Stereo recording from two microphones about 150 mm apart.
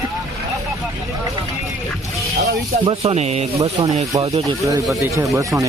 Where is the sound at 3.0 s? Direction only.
45° right (ahead or behind).